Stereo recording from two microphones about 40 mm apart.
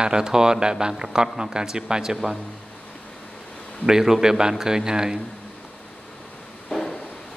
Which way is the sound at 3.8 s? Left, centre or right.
Centre.